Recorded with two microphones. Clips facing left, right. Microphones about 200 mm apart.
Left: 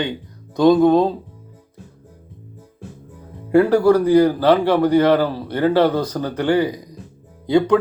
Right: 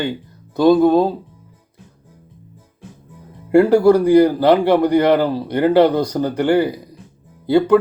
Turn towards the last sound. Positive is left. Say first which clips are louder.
# right 2 dB
turn(degrees=-5)  # may be behind; listen again after turning